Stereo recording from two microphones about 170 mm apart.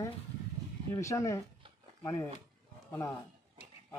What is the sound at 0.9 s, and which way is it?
Speech, 20° left (ahead or behind).